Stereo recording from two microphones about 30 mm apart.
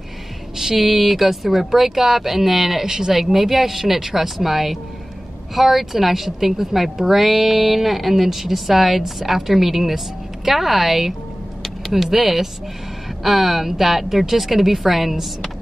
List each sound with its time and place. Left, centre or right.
0.6 s a woman's voice: centre
2.9 s speech: centre
3.2 s a woman's voice: centre